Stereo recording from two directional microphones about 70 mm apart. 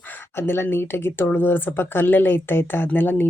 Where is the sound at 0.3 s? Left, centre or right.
Left.